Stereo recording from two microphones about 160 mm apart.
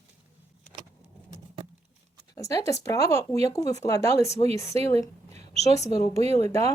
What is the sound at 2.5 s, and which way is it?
Speech, 20° left (ahead or behind).